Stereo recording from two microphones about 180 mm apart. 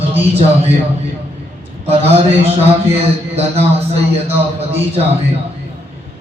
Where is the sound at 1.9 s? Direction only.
35° right (ahead or behind).